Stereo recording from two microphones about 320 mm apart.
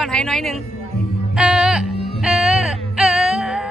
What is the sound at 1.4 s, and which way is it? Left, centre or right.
Music, centre.